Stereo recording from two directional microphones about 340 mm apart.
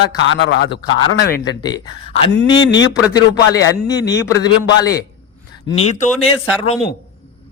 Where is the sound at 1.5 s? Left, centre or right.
Centre.